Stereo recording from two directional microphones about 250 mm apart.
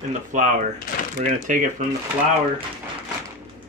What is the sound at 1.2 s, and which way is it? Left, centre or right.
Speech, right.